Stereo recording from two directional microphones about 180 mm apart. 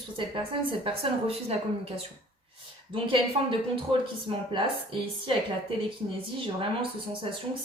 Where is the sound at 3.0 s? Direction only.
30° right (ahead or behind).